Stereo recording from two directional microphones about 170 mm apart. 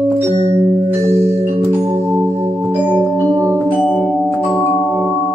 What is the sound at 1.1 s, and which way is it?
Music, 15° right (ahead or behind).